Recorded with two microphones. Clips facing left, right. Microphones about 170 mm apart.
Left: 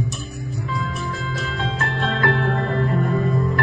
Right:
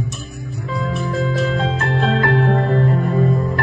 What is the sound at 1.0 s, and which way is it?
Music, 40° right (ahead or behind).